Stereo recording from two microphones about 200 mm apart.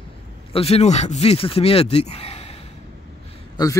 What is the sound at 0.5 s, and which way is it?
Speech, 30° left (ahead or behind).